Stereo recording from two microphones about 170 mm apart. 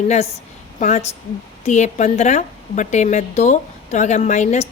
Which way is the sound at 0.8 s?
45° left (ahead or behind).